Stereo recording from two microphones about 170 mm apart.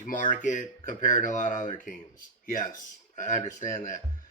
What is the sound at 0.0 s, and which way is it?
Speech, 50° left (ahead or behind).